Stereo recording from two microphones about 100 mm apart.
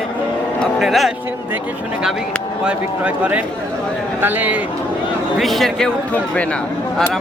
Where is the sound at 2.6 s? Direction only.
10° right (ahead or behind).